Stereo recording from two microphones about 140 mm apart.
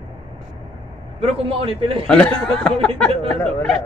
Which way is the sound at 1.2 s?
40° right (ahead or behind).